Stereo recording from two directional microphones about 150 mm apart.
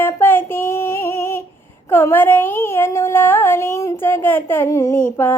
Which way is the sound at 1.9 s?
15° left (ahead or behind).